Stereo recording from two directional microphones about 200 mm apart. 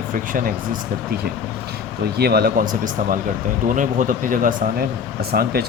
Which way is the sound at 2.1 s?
50° right (ahead or behind).